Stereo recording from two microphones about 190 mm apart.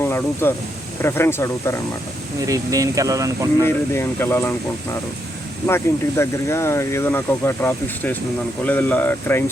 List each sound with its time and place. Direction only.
0.0 s speech: 10° left (ahead or behind)
2.5 s speech: 15° right (ahead or behind)
3.6 s speech: 10° left (ahead or behind)
5.6 s speech: 15° left (ahead or behind)